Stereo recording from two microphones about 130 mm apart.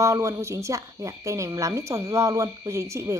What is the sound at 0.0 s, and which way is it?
Speech, 25° right (ahead or behind).